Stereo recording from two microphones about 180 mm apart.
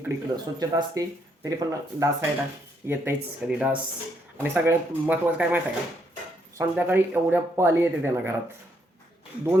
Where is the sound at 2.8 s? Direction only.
10° right (ahead or behind).